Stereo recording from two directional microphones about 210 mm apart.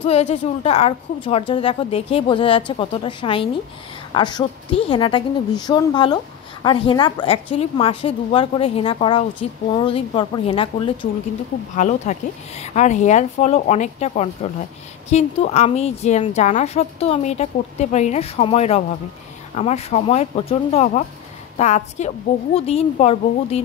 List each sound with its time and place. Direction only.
0.0 s a woman's voice: 30° left (ahead or behind)
11.7 s a woman's voice: 35° left (ahead or behind)